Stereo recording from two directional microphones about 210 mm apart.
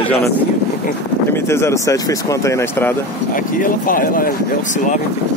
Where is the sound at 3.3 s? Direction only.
40° left (ahead or behind).